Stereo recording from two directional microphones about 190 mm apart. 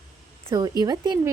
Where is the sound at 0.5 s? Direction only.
20° right (ahead or behind).